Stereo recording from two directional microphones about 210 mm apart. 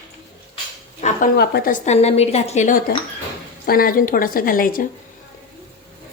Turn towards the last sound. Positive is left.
turn(degrees=40)  # may be behind; listen again after turning